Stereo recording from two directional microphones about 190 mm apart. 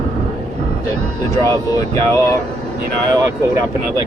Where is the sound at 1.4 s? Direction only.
15° left (ahead or behind).